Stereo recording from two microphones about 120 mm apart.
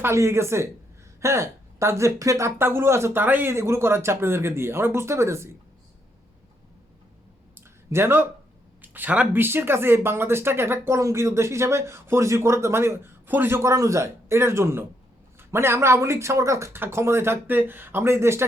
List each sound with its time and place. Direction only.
0.0 s speech: 20° right (ahead or behind)
7.5 s a sound: 20° right (ahead or behind)
8.8 s speech: 15° right (ahead or behind)